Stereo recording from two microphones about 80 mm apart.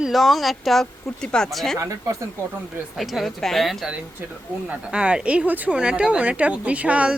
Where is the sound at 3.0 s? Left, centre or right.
Centre.